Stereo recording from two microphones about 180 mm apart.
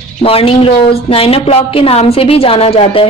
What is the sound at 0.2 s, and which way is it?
A woman's voice, 30° left (ahead or behind).